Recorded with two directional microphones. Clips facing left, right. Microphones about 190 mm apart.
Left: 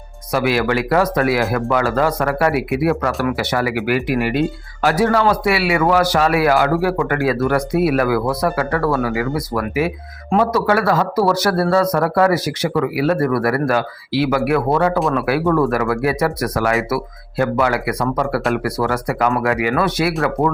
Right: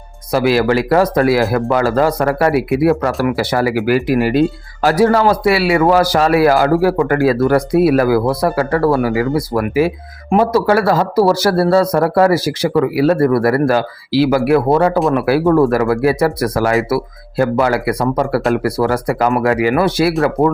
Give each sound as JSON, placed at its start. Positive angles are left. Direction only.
{"t": 0.3, "sound": "speech", "side_deg": -35}